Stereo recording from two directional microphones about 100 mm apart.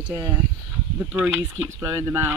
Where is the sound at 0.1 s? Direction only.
25° right (ahead or behind).